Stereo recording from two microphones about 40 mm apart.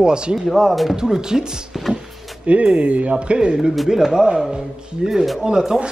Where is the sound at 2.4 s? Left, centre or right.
Right.